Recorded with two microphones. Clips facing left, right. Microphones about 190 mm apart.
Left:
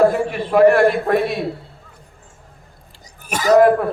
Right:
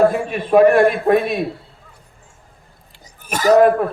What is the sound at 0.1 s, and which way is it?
A man's voice, 20° right (ahead or behind).